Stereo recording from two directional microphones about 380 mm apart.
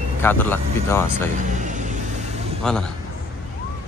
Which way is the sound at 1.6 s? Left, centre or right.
Centre.